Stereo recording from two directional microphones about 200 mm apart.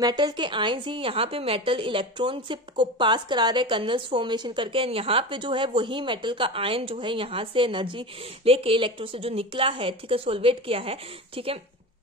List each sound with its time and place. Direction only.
0.0 s a woman's voice: 20° right (ahead or behind)